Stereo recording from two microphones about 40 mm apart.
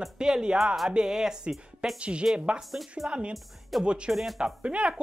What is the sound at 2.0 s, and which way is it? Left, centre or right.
Speech, right.